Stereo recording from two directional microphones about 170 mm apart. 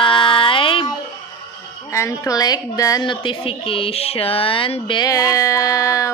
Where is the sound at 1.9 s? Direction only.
15° left (ahead or behind).